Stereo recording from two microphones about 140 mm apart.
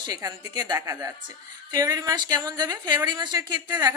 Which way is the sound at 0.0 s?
25° right (ahead or behind).